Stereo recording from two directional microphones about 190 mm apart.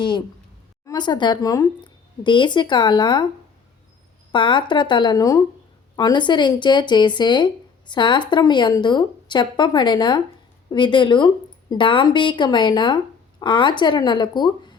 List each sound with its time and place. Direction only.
0.9 s speech: 25° left (ahead or behind)
4.3 s speech: 25° left (ahead or behind)